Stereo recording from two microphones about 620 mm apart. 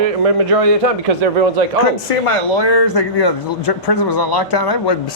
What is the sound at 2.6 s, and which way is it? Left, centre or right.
Speech, left.